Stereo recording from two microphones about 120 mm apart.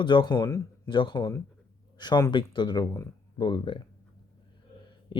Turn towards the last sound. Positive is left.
turn(degrees=40)  # may be behind; listen again after turning